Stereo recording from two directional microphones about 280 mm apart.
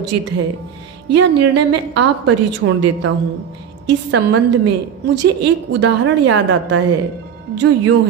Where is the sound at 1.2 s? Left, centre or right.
Right.